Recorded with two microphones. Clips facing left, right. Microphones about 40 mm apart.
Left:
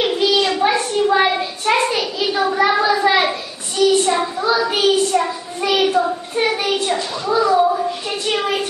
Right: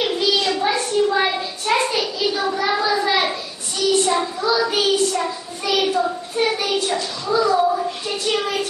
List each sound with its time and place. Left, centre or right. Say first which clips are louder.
0.0 s a sound: left 3 dB; centre
4.0 s child singing: left 2 dB; centre
6.5 s hands: left 2 dB; centre